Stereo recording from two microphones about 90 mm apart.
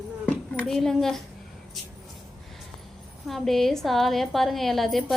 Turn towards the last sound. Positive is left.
turn(degrees=0)  # may be behind; listen again after turning